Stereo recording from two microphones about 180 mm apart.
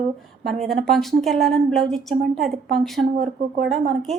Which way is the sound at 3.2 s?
55° right (ahead or behind).